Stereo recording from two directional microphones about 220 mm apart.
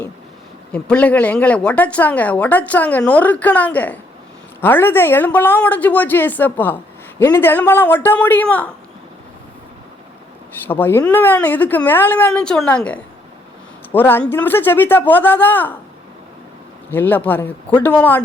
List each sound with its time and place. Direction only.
0.7 s speech: 5° left (ahead or behind)
10.7 s speech: 10° left (ahead or behind)
16.9 s speech: 10° left (ahead or behind)